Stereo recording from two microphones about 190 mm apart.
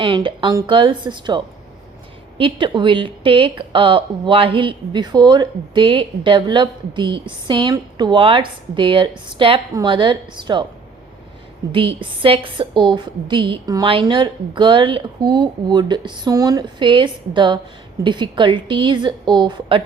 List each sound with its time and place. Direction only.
0.0 s a woman's voice: 25° right (ahead or behind)
2.4 s a woman's voice: 25° right (ahead or behind)
11.7 s a woman's voice: 25° right (ahead or behind)